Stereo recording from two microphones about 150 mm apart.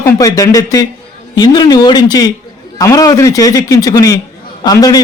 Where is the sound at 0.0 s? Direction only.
20° left (ahead or behind).